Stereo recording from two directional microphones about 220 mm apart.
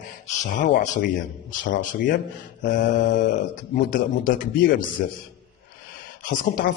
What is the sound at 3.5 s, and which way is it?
A man's voice, 35° left (ahead or behind).